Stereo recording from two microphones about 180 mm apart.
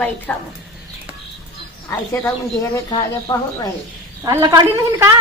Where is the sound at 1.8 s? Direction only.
15° left (ahead or behind).